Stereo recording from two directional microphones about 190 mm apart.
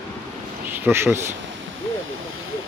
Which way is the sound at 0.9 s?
10° right (ahead or behind).